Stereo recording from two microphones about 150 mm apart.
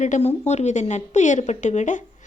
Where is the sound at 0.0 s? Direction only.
50° left (ahead or behind).